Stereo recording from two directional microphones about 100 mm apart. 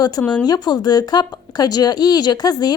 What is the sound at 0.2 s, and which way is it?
Speech, 10° left (ahead or behind).